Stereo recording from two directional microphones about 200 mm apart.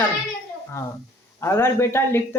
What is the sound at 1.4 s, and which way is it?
Speech, 15° left (ahead or behind).